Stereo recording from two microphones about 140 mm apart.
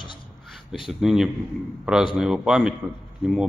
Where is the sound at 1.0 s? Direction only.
5° right (ahead or behind).